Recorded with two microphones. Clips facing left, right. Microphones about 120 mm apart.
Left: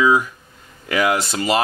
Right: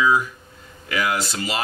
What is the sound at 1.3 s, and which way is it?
Speech, 45° left (ahead or behind).